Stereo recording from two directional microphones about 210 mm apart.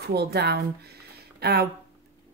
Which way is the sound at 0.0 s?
50° right (ahead or behind).